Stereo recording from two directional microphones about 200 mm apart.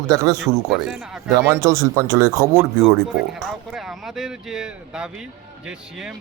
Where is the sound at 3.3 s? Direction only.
Centre (ahead or behind).